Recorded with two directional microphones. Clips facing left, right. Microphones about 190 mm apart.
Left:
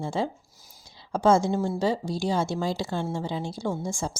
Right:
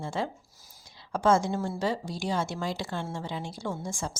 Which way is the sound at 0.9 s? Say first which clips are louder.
Left 3 dB; 25° left (ahead or behind).